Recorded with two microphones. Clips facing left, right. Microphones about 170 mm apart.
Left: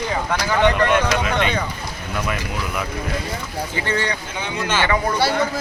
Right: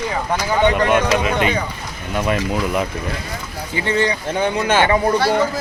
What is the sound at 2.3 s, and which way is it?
Speech, 30° right (ahead or behind).